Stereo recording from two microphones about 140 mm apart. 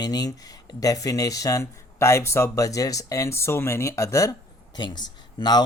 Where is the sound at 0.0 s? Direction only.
30° left (ahead or behind).